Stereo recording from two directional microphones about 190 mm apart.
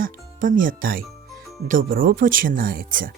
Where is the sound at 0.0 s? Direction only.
45° right (ahead or behind).